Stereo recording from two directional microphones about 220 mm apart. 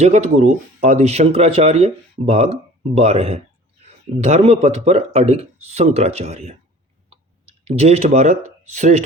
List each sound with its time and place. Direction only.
0.0 s speech: 30° right (ahead or behind)
7.6 s speech: 30° right (ahead or behind)